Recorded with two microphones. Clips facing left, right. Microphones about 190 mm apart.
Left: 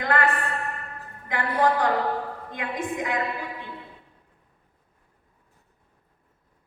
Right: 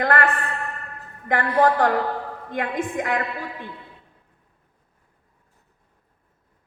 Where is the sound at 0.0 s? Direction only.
55° right (ahead or behind).